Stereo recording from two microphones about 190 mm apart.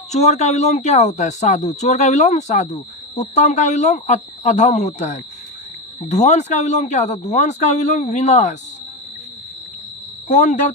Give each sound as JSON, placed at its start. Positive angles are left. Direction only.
{"t": 0.1, "sound": "speech", "side_deg": 35}
{"t": 10.2, "sound": "speech", "side_deg": 40}